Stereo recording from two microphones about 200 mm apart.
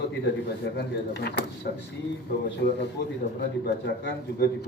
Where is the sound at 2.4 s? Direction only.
60° left (ahead or behind).